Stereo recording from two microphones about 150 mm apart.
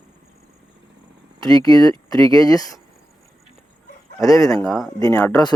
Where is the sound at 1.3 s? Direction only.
25° left (ahead or behind).